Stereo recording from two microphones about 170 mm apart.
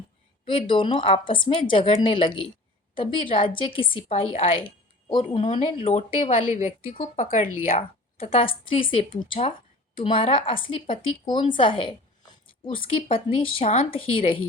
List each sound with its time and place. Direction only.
0.4 s a woman's voice: 30° left (ahead or behind)
13.3 s speech: 35° left (ahead or behind)